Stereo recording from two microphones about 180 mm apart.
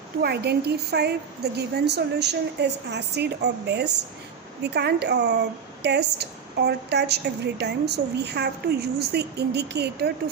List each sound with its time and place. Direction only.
0.2 s a woman's voice: 60° right (ahead or behind)